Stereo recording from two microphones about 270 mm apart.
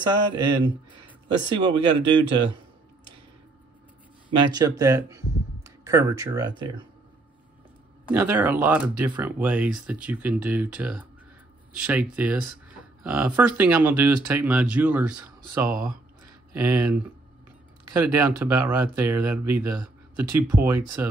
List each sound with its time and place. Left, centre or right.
0.0 s speech: centre
4.3 s speech: centre
8.1 s speech: centre